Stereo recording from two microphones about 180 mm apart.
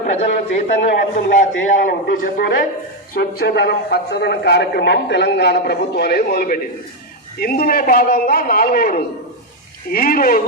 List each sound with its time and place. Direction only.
0.0 s a man's voice: 40° left (ahead or behind)
3.2 s a man's voice: 65° left (ahead or behind); by 10.4 s 50° left (ahead or behind)